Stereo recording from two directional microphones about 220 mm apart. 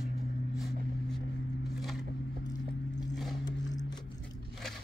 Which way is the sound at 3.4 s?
15° left (ahead or behind).